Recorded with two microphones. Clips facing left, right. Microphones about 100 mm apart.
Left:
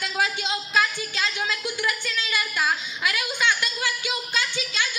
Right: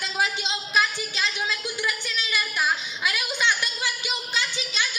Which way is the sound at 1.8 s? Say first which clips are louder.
Left 2 dB; 15° right (ahead or behind).